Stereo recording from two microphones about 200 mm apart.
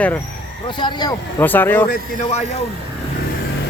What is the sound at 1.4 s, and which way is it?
Speech, 10° left (ahead or behind).